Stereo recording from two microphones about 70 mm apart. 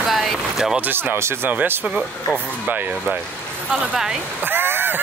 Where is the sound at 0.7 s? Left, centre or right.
Right.